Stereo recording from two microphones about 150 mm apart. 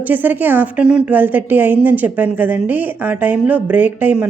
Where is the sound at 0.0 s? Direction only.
10° right (ahead or behind).